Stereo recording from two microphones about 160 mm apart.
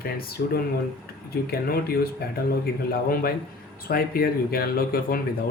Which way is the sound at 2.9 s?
70° left (ahead or behind).